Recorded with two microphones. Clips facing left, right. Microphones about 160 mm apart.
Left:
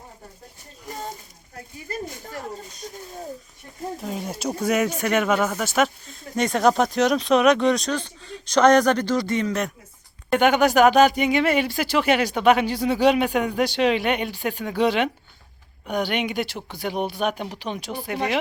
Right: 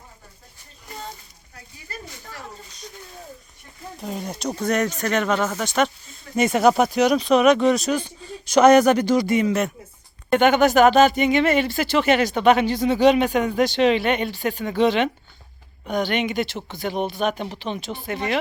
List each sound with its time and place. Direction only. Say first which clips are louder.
1.5 s speech: left 7 dB; 50° left (ahead or behind)
3.9 s speech: right 3 dB; centre (ahead or behind)
10.2 s speech: right 2 dB; 5° left (ahead or behind)